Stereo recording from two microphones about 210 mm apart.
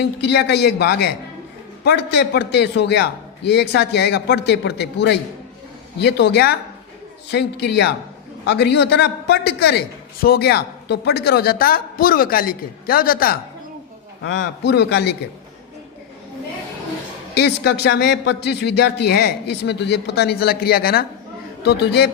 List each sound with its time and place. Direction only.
0.0 s a man's voice: 55° left (ahead or behind)
14.3 s a man's voice: 55° left (ahead or behind)
17.3 s a man's voice: 55° left (ahead or behind)